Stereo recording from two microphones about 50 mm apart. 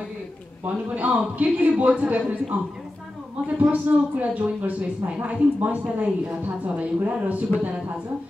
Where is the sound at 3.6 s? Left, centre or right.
Right.